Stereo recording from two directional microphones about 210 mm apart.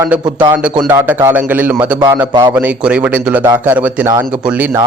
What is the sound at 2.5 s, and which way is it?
A man's voice, 5° right (ahead or behind).